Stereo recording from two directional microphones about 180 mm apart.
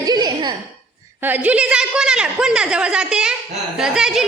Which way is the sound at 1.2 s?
10° right (ahead or behind).